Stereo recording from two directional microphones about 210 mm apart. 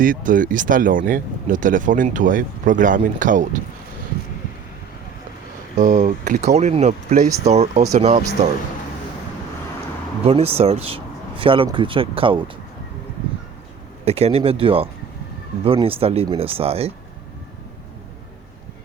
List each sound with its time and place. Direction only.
0.0 s speech: 40° right (ahead or behind)
5.7 s speech: 35° right (ahead or behind)
10.2 s speech: 30° right (ahead or behind)
14.0 s speech: 30° right (ahead or behind)